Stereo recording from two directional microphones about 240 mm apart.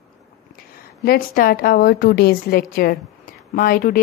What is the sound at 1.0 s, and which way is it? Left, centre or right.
Speech, left.